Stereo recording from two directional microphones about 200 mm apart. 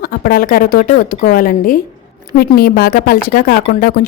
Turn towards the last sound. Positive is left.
turn(degrees=45)  # may be behind; listen again after turning